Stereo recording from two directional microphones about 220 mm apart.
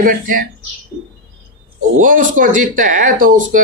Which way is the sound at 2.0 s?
35° right (ahead or behind).